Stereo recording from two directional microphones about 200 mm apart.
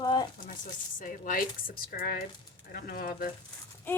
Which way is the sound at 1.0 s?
45° left (ahead or behind).